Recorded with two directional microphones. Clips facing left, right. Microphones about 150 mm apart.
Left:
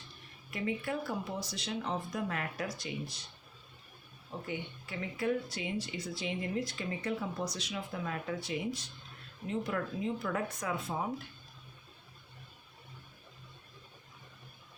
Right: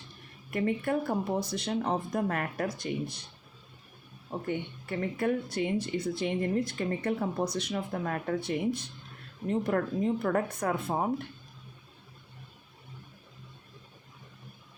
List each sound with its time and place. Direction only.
0.5 s speech: 55° right (ahead or behind)
4.3 s speech: 50° right (ahead or behind)